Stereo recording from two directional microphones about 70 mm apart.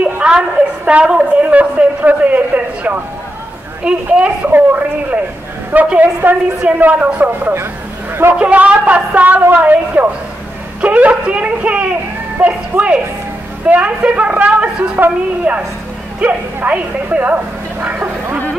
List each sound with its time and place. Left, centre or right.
0.0 s a sound: centre
0.8 s a child's voice: centre
3.8 s a child's voice: centre
4.5 s a child's voice: right
8.1 s a man's voice: right
8.4 s a child's voice: centre